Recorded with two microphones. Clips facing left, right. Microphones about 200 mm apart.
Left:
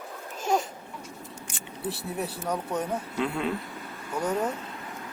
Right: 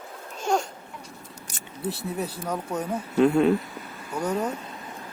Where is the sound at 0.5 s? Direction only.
Centre (ahead or behind).